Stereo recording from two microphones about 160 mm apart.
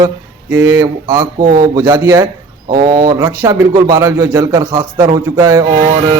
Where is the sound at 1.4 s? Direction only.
70° right (ahead or behind).